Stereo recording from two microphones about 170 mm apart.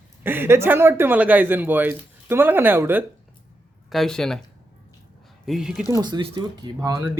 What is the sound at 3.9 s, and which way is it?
Speech, centre (ahead or behind).